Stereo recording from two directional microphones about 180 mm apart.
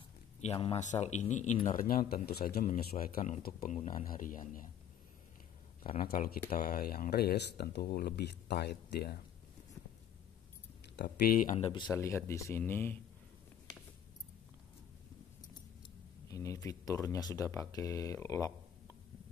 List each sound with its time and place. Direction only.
0.7 s speech: 40° left (ahead or behind)
1.8 s speech: 55° left (ahead or behind)
5.9 s speech: 55° left (ahead or behind)
11.0 s speech: 60° left (ahead or behind)
11.6 s speech: 25° left (ahead or behind)
11.9 s speech: 15° left (ahead or behind)
16.3 s speech: 15° left (ahead or behind)